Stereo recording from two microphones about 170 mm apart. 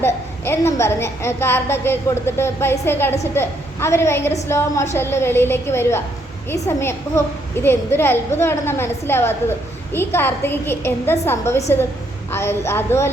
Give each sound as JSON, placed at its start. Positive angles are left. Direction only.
{"t": 0.0, "sound": "a woman's voice", "side_deg": 15}